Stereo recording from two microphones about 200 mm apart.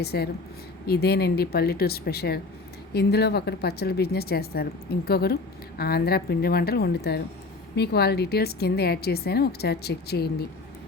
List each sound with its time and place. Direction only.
0.0 s speech: 55° left (ahead or behind)